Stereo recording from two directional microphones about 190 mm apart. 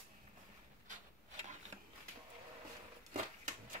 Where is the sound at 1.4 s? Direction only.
40° right (ahead or behind).